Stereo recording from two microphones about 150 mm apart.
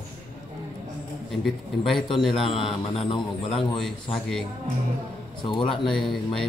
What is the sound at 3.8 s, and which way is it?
Speech, 5° left (ahead or behind).